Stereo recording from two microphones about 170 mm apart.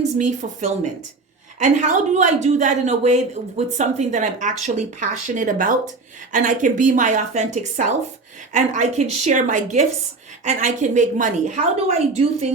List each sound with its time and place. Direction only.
0.2 s a woman's voice: 45° right (ahead or behind)